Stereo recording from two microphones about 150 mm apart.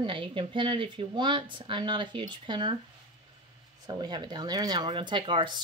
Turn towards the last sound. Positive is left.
turn(degrees=-30)  # may be behind; listen again after turning